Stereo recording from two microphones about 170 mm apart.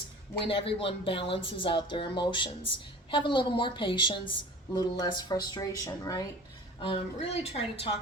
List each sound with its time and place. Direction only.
0.3 s a woman's voice: 30° left (ahead or behind)
6.8 s speech: 35° left (ahead or behind)